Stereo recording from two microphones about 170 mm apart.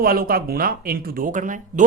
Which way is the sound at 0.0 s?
60° right (ahead or behind).